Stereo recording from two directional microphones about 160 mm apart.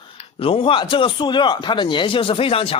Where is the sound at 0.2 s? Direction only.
35° left (ahead or behind).